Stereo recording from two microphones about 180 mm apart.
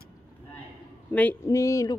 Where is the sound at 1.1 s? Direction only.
10° left (ahead or behind).